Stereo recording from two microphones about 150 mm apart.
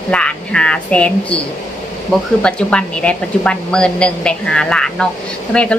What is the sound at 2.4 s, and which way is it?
A woman's voice, 5° left (ahead or behind).